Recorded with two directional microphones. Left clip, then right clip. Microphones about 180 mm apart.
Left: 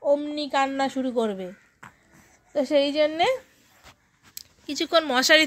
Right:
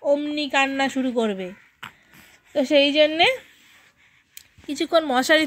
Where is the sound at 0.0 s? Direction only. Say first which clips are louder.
Right 2 dB; 20° right (ahead or behind).